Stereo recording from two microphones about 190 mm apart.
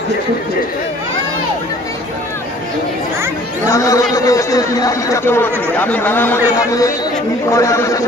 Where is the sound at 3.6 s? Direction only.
15° left (ahead or behind).